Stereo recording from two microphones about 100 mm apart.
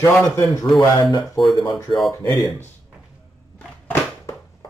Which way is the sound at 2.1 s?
25° left (ahead or behind).